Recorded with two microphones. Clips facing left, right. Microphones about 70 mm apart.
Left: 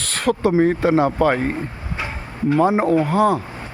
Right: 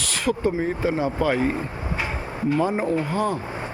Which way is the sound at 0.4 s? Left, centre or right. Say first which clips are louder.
Left 10 dB; left.